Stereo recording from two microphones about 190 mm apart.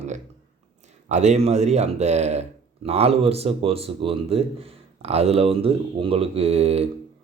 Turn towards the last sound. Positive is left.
turn(degrees=-30)  # may be behind; listen again after turning